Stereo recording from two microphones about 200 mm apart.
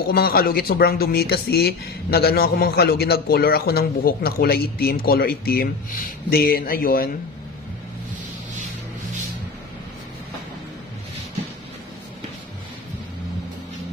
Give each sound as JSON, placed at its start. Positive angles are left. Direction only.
{"t": 0.1, "sound": "speech", "side_deg": 50}